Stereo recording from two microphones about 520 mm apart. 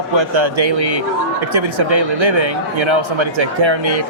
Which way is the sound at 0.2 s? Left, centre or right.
Right.